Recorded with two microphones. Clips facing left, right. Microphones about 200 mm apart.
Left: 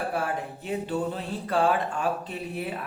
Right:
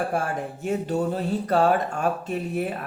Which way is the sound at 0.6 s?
45° right (ahead or behind).